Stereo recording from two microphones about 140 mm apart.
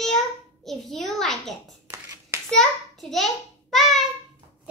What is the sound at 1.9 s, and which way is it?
Hands, 20° right (ahead or behind).